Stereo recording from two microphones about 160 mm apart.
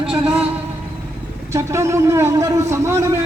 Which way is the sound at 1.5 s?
20° right (ahead or behind).